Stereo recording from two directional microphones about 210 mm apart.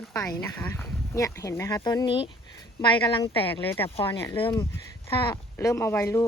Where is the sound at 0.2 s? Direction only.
10° left (ahead or behind).